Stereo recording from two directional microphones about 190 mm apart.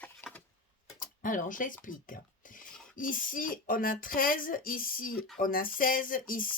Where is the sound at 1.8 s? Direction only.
45° left (ahead or behind).